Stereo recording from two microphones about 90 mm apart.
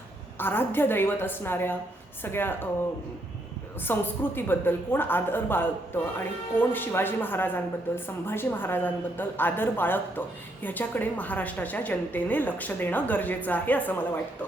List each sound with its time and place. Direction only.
0.3 s a woman's voice: 25° left (ahead or behind)
3.8 s a woman's voice: 25° left (ahead or behind)